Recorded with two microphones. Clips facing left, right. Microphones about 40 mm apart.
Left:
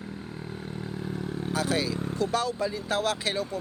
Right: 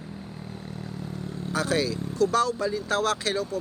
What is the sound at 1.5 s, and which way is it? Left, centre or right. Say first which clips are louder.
Speech: right 3 dB; centre.